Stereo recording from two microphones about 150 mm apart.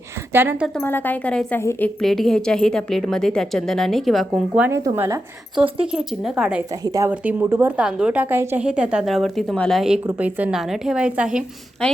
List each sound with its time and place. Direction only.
0.3 s a woman's voice: 15° right (ahead or behind)
0.8 s a woman's voice: 15° left (ahead or behind)
2.0 s a woman's voice: centre (ahead or behind)
4.5 s a woman's voice: 10° right (ahead or behind)
4.9 s a woman's voice: 25° right (ahead or behind)
5.8 s a woman's voice: 5° right (ahead or behind)
6.8 s a woman's voice: 25° right (ahead or behind)
7.1 s a woman's voice: 10° right (ahead or behind)